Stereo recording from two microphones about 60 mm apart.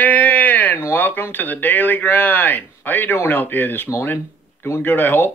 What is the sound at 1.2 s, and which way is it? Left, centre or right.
Speech, left.